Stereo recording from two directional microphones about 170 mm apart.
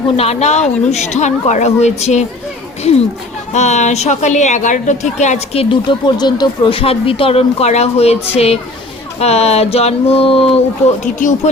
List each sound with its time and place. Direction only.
0.2 s speech: 40° left (ahead or behind)
3.5 s a woman's voice: 45° left (ahead or behind)
5.9 s speech: 25° left (ahead or behind)
11.0 s a woman's voice: 45° left (ahead or behind)